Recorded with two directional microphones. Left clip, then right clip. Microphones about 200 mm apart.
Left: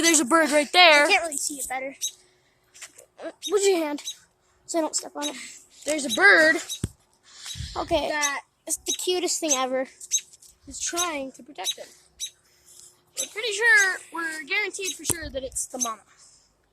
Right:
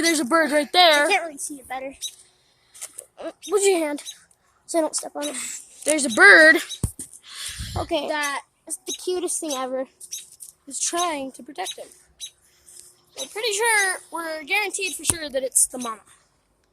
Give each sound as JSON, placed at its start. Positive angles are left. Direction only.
{"t": 0.0, "sound": "a woman's voice", "side_deg": 5}
{"t": 1.7, "sound": "a woman's voice", "side_deg": 5}
{"t": 3.5, "sound": "a woman's voice", "side_deg": 0}
{"t": 5.5, "sound": "speech", "side_deg": -45}
{"t": 7.8, "sound": "speech", "side_deg": 15}
{"t": 8.1, "sound": "speech", "side_deg": -45}
{"t": 9.0, "sound": "speech", "side_deg": 20}
{"t": 10.7, "sound": "speech", "side_deg": -45}
{"t": 11.0, "sound": "a woman's voice", "side_deg": -35}
{"t": 13.3, "sound": "speech", "side_deg": -45}